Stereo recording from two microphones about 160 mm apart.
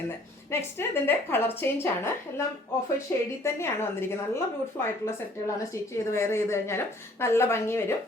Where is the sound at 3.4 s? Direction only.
15° left (ahead or behind).